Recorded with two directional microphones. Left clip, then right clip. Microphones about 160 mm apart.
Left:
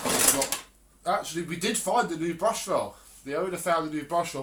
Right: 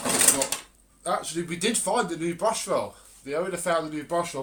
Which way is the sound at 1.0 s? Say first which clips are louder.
Even; 45° right (ahead or behind).